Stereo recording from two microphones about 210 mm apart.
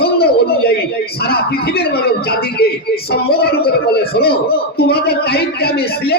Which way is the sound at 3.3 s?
50° left (ahead or behind).